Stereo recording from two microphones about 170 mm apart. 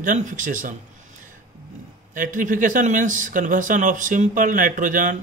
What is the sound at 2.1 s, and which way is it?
Speech, 50° right (ahead or behind).